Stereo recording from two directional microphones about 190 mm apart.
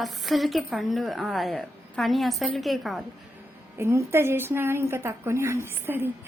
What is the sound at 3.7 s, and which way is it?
A woman's voice, 15° right (ahead or behind).